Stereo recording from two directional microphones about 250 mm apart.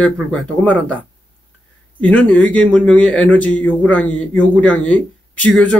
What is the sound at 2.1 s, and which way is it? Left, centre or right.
Speech, centre.